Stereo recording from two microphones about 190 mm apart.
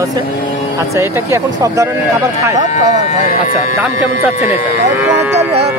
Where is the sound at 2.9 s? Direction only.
35° left (ahead or behind).